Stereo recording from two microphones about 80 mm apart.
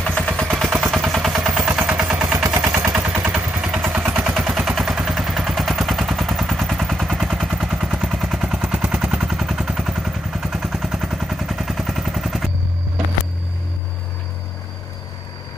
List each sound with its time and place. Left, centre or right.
0.0 s gunshot: centre
2.3 s gunshot: right
2.9 s vehicle: centre
3.6 s vehicle: centre
4.1 s gunshot: centre
8.6 s vehicle: centre